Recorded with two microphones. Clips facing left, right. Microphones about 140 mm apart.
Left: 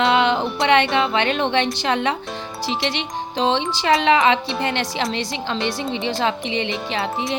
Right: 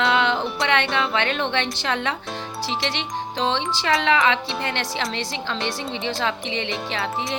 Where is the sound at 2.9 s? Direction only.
15° left (ahead or behind).